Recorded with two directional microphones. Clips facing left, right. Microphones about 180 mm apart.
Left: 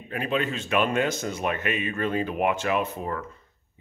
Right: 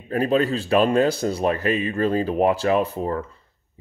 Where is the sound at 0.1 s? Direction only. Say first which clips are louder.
Right 7 dB; 35° right (ahead or behind).